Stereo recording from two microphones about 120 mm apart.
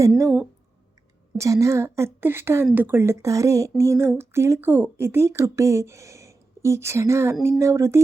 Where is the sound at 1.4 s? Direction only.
25° right (ahead or behind).